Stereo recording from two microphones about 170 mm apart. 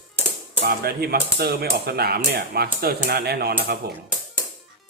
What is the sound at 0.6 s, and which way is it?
Speech, 65° right (ahead or behind).